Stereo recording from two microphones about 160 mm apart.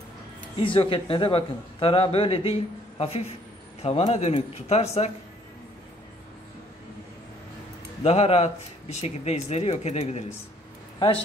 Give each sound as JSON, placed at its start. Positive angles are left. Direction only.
{"t": 0.6, "sound": "speech", "side_deg": 35}
{"t": 8.0, "sound": "speech", "side_deg": 40}